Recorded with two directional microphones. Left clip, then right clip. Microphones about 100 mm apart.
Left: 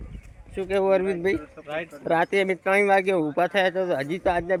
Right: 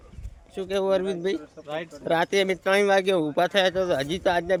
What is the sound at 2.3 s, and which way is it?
Speech, centre (ahead or behind).